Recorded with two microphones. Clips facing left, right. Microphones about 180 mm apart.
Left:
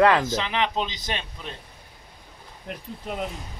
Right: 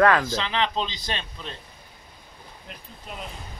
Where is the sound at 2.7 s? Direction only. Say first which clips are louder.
Left 9 dB; 60° left (ahead or behind).